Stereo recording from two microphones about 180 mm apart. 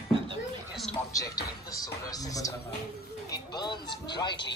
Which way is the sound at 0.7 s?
Centre (ahead or behind).